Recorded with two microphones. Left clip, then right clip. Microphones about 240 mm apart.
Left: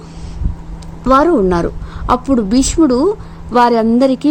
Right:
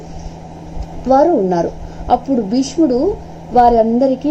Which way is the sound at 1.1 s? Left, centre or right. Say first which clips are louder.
Left 1 dB; left.